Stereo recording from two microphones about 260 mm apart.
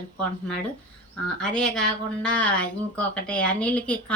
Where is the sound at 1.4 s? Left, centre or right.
Centre.